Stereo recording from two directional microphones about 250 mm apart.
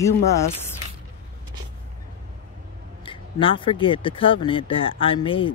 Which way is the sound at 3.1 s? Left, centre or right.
Left.